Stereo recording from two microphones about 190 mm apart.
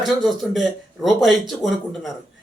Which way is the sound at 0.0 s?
Centre (ahead or behind).